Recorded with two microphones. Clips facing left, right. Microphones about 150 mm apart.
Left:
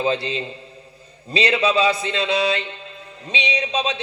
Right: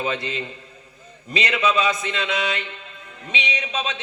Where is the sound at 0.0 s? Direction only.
30° left (ahead or behind).